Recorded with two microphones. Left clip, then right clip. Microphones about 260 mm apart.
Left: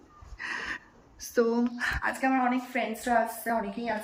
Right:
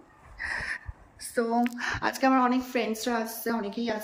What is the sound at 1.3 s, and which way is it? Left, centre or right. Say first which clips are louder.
Speech: left 1 dB; centre.